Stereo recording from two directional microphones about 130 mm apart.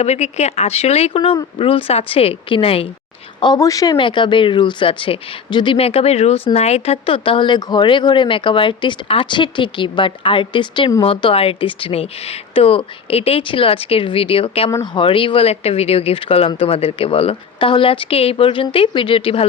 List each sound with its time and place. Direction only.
0.0 s speech: 55° left (ahead or behind)
3.4 s a woman's voice: 30° left (ahead or behind)
3.9 s a woman's voice: 40° left (ahead or behind)